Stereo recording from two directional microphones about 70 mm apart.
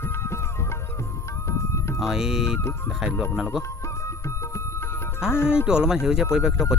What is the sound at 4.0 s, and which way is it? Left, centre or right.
Music, left.